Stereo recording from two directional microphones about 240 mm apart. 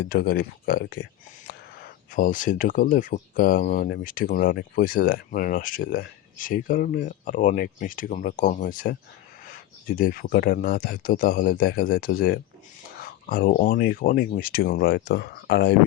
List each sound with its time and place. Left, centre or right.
0.1 s speech: left